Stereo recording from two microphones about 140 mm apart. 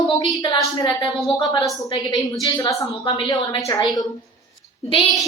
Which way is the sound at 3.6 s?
25° left (ahead or behind).